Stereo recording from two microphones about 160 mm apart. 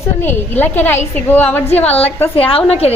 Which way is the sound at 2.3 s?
35° left (ahead or behind).